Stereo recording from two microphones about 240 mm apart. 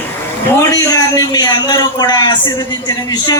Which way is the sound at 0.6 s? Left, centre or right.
Centre.